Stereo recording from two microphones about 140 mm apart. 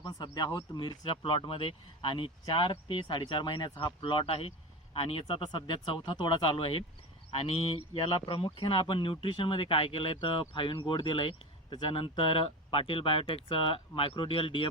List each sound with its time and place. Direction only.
0.0 s speech: 25° left (ahead or behind)